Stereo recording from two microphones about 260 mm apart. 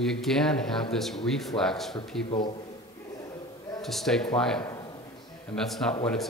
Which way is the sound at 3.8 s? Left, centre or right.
Centre.